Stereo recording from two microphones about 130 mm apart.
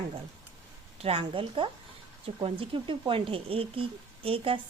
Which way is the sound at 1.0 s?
45° right (ahead or behind).